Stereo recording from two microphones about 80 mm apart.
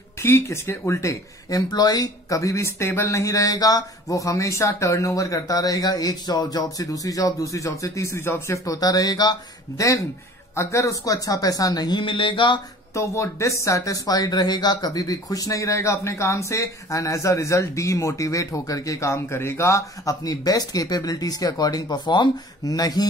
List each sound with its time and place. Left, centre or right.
0.2 s speech: left
1.5 s speech: left
8.6 s speech: left
9.8 s speech: left
12.9 s speech: left
22.7 s speech: left